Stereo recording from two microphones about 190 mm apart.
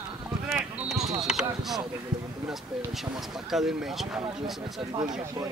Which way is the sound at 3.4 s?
Centre (ahead or behind).